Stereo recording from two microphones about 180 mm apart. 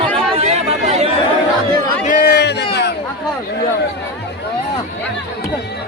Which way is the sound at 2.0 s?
55° left (ahead or behind).